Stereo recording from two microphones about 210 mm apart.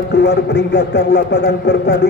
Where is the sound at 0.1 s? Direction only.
50° left (ahead or behind).